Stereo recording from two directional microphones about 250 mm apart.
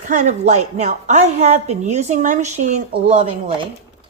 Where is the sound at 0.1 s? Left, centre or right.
Right.